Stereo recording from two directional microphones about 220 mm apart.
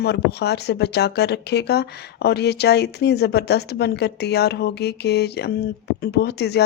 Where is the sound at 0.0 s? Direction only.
50° left (ahead or behind).